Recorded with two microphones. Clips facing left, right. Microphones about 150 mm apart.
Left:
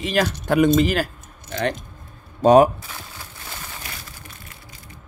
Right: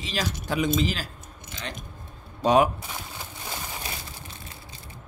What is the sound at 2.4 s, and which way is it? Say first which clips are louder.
Speech: left 7 dB; 45° left (ahead or behind).